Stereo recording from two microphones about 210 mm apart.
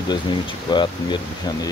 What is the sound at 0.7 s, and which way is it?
Speech, 20° left (ahead or behind).